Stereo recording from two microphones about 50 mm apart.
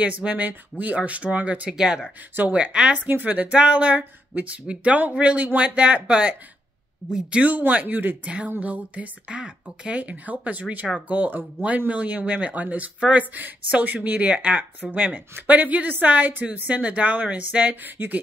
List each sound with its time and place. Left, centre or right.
0.0 s speech: right
1.8 s speech: centre
2.5 s speech: right
3.1 s a woman's voice: right
3.5 s speech: right
7.4 s a woman's voice: right
14.6 s a woman's voice: right